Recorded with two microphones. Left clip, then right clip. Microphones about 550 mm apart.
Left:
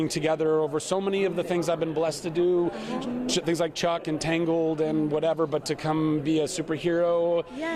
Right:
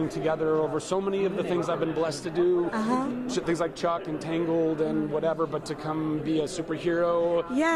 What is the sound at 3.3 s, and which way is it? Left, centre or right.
Speech, left.